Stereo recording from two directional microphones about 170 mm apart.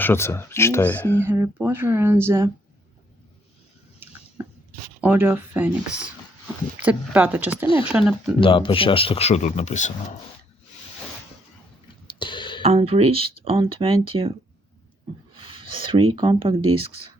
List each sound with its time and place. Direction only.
0.0 s speech: 15° left (ahead or behind)
1.2 s speech: 10° right (ahead or behind)
4.4 s a sound: 10° right (ahead or behind)
4.9 s speech: 10° right (ahead or behind)
8.4 s speech: 30° left (ahead or behind)
12.0 s a sound: 30° left (ahead or behind)
12.6 s speech: 35° right (ahead or behind)
15.4 s speech: 30° right (ahead or behind)